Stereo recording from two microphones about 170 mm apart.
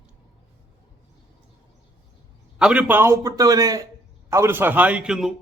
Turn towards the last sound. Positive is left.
turn(degrees=-5)  # may be behind; listen again after turning